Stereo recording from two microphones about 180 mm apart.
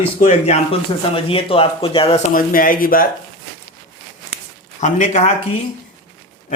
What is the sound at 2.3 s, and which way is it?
Speech, 50° left (ahead or behind).